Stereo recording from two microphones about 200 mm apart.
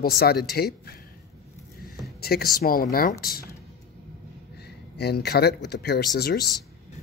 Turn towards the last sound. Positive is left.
turn(degrees=50)  # may be behind; listen again after turning